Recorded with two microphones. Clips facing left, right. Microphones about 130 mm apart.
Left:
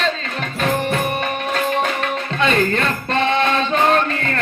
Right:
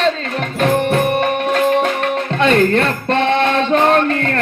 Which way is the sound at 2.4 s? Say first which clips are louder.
Right 5 dB; 60° right (ahead or behind).